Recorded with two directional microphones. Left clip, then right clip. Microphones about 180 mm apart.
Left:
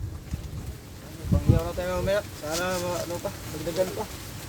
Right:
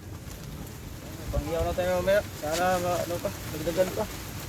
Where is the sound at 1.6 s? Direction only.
10° left (ahead or behind).